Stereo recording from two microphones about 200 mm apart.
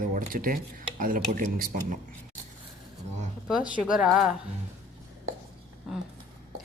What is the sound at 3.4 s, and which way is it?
Speech, 5° right (ahead or behind).